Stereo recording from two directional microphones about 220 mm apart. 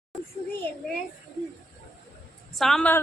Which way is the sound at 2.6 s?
Centre (ahead or behind).